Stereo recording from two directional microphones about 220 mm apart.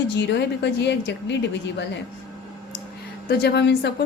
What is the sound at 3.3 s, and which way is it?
Speech, 50° left (ahead or behind).